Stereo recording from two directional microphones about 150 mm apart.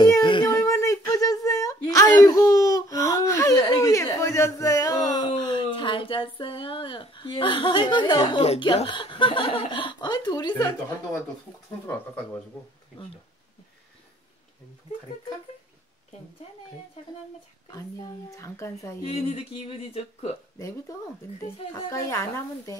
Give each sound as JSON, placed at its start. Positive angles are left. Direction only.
{"t": 0.0, "sound": "child singing", "side_deg": 30}
{"t": 0.6, "sound": "a sound", "side_deg": 20}
{"t": 5.3, "sound": "speech", "side_deg": 30}
{"t": 18.3, "sound": "speech", "side_deg": 20}
{"t": 19.0, "sound": "speech", "side_deg": 40}
{"t": 21.9, "sound": "speech", "side_deg": 20}